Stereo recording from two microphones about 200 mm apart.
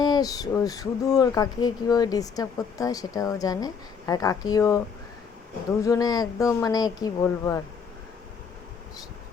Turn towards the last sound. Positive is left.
turn(degrees=15)  # may be behind; listen again after turning